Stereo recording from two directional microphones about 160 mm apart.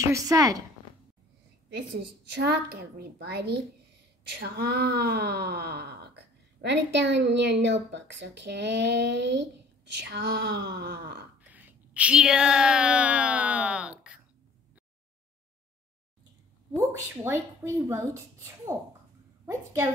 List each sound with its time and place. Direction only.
0.0 s speech: 20° right (ahead or behind)
2.7 s speech: 80° right
11.4 s speech: 10° right (ahead or behind)
16.7 s a woman's voice: 15° right (ahead or behind)